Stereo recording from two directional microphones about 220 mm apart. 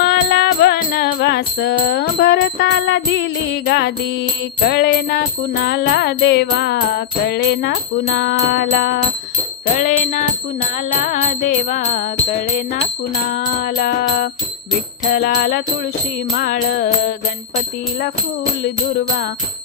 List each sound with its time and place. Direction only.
0.0 s music: 45° left (ahead or behind)
9.8 s music: 35° left (ahead or behind)